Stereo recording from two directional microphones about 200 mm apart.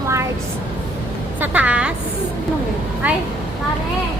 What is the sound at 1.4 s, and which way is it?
Speech, 5° right (ahead or behind).